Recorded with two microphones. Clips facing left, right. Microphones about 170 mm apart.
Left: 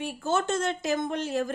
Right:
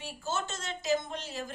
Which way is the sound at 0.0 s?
55° left (ahead or behind).